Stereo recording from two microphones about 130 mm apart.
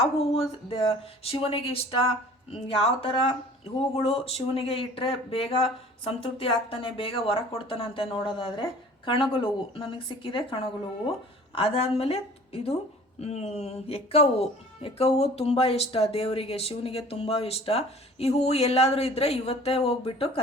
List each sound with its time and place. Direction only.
0.0 s speech: 50° left (ahead or behind)